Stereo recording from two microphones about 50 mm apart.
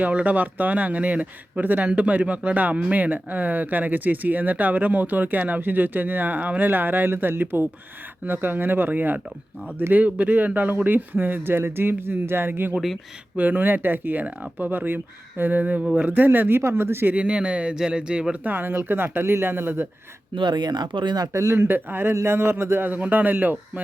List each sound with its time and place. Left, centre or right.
0.0 s speech: right
12.7 s speech: centre
13.3 s speech: right
15.8 s speech: centre
16.0 s speech: right
16.6 s speech: right
17.2 s speech: right
18.4 s speech: right
21.3 s speech: right
22.1 s speech: right
22.9 s speech: right